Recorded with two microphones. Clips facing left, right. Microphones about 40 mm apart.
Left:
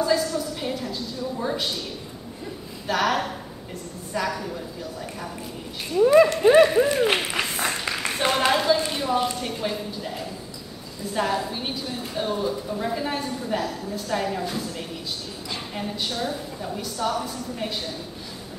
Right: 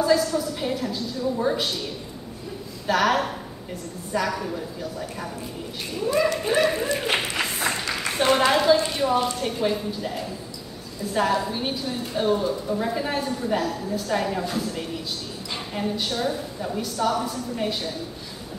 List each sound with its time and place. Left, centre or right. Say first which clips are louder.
0.0 s a woman's voice: right 2 dB; centre
2.9 s a woman's voice: right 2 dB; centre
6.3 s a sound: left 7 dB; left
6.6 s a woman's voice: left 5 dB; centre